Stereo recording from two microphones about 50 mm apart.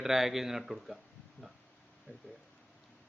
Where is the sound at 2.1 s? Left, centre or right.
Right.